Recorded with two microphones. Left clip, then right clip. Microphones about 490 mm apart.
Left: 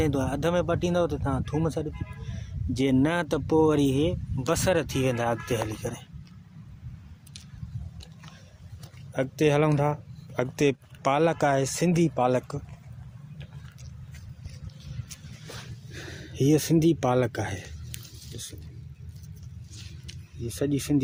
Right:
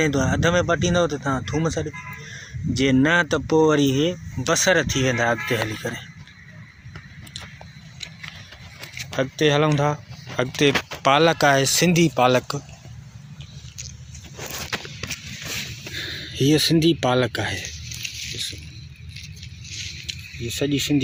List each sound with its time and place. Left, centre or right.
0.0 s speech: left
9.1 s speech: left
16.0 s speech: left
20.1 s speech: left